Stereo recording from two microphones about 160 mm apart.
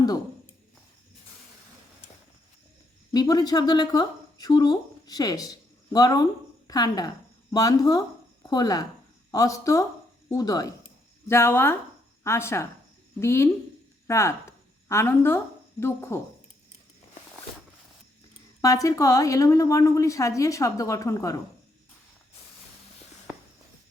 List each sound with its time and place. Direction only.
3.1 s a woman's voice: 25° left (ahead or behind)
10.8 s a sound: 15° left (ahead or behind)
12.2 s a woman's voice: 15° left (ahead or behind)
18.6 s a woman's voice: 20° left (ahead or behind)